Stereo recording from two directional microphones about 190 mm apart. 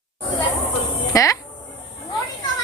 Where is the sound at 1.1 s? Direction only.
15° left (ahead or behind).